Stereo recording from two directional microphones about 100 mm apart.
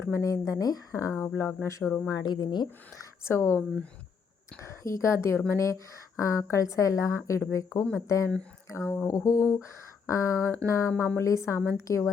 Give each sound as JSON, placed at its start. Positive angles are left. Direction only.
{"t": 0.0, "sound": "a woman's voice", "side_deg": 30}
{"t": 2.0, "sound": "a woman's voice", "side_deg": 45}
{"t": 3.0, "sound": "speech", "side_deg": 25}
{"t": 4.6, "sound": "a woman's voice", "side_deg": 30}